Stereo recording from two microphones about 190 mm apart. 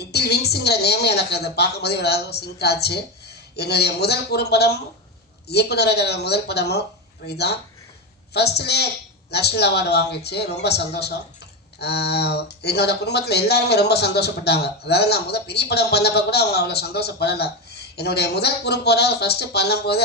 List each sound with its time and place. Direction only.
0.0 s speech: 60° left (ahead or behind)
8.3 s speech: 60° left (ahead or behind)